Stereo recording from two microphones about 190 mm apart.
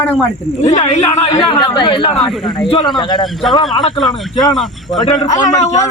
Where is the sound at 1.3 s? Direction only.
25° left (ahead or behind).